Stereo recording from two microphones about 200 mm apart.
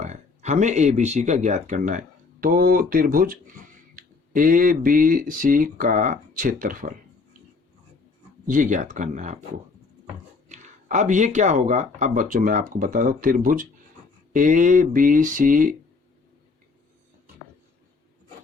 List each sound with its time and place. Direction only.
0.0 s speech: 35° right (ahead or behind)
8.4 s speech: 40° right (ahead or behind)
10.5 s speech: 35° right (ahead or behind)